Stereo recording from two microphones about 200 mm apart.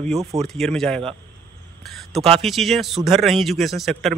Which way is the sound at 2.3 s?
Centre (ahead or behind).